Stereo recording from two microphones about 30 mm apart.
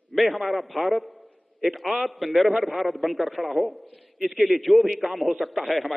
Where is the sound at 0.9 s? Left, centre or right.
Centre.